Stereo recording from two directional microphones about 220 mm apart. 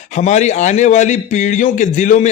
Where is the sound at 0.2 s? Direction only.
30° left (ahead or behind).